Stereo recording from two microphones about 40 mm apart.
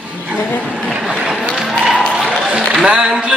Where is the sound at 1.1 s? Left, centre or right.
Centre.